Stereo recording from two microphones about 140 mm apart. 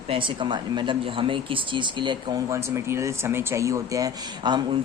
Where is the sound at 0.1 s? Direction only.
35° right (ahead or behind).